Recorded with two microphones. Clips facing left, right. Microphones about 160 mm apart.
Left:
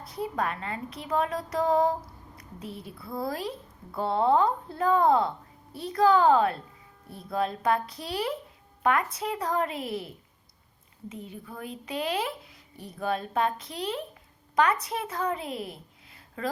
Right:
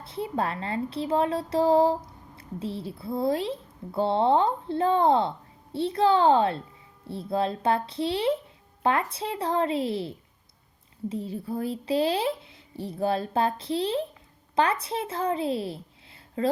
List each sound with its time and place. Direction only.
0.0 s a woman's voice: 25° right (ahead or behind)